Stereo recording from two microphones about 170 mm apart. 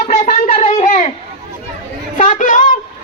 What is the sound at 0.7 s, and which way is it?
Children playing, 40° left (ahead or behind).